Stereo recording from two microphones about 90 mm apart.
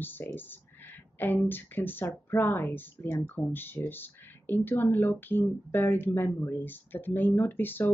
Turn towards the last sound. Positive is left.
turn(degrees=20)  # may be behind; listen again after turning